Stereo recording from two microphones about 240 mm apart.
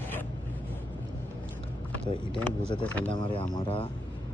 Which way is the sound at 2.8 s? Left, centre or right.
Centre.